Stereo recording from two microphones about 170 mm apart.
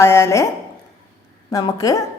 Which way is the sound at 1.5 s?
20° left (ahead or behind).